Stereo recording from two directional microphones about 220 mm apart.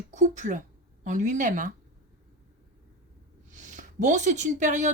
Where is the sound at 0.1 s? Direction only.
35° right (ahead or behind).